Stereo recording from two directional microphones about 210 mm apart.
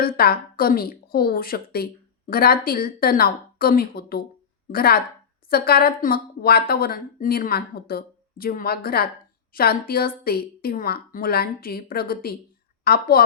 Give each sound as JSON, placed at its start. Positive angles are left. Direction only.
{"t": 0.0, "sound": "a woman's voice", "side_deg": 45}